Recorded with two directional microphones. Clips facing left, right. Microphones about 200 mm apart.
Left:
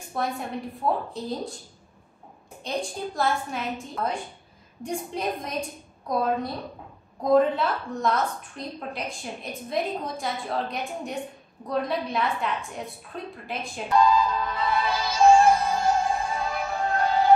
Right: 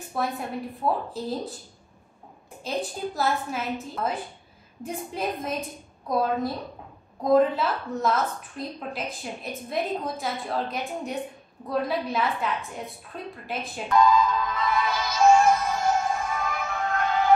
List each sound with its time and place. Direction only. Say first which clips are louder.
0.1 s a woman's voice: even; centre (ahead or behind)
2.6 s a woman's voice: right 1 dB; 5° right (ahead or behind)
13.9 s music: right 1 dB; 30° left (ahead or behind)